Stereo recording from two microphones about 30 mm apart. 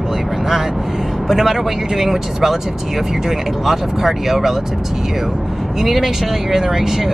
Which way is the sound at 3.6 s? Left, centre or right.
Centre.